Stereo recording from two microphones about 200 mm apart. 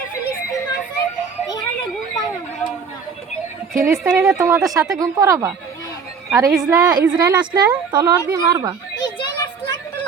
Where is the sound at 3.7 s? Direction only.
15° right (ahead or behind).